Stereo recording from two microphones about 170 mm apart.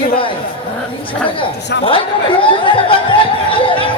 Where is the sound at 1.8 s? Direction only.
30° left (ahead or behind).